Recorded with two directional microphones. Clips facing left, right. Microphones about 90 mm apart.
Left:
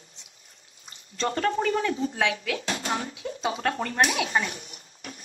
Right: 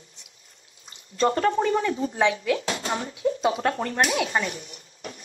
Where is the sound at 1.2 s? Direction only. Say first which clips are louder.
Right 4 dB; 25° right (ahead or behind).